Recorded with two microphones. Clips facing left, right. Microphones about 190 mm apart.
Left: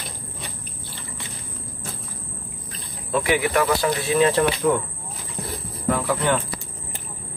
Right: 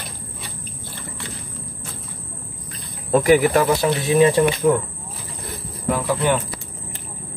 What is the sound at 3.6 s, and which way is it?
Speech, 20° right (ahead or behind).